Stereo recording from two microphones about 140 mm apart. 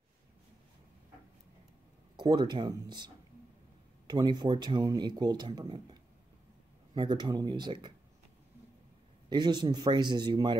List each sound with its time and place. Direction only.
2.1 s speech: 30° right (ahead or behind)
4.1 s speech: 30° right (ahead or behind)
9.3 s speech: 30° right (ahead or behind)